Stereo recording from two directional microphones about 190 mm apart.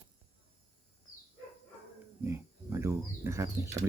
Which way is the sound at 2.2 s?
15° right (ahead or behind).